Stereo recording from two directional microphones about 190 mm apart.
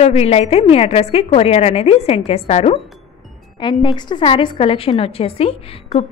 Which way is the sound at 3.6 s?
25° left (ahead or behind).